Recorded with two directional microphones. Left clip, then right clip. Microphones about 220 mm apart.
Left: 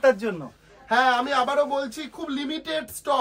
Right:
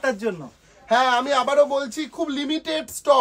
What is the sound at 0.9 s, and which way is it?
Speech, 40° right (ahead or behind).